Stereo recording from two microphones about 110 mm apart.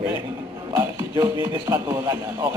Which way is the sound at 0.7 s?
30° right (ahead or behind).